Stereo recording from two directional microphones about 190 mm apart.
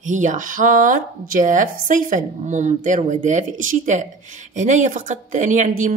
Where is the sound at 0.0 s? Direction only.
40° right (ahead or behind).